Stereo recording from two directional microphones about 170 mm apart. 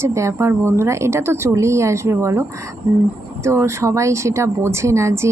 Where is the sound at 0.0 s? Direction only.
15° right (ahead or behind).